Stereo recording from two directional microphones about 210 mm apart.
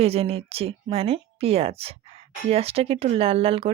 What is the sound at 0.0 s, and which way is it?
A woman's voice, 30° right (ahead or behind).